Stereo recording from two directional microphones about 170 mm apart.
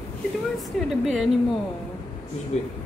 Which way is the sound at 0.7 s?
Centre (ahead or behind).